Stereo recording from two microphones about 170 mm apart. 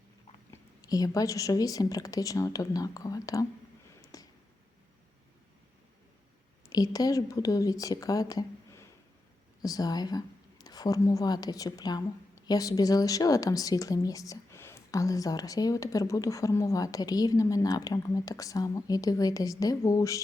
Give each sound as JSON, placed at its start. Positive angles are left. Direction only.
{"t": 0.5, "sound": "speech", "side_deg": 20}
{"t": 4.0, "sound": "a sound", "side_deg": 20}
{"t": 6.7, "sound": "speech", "side_deg": 20}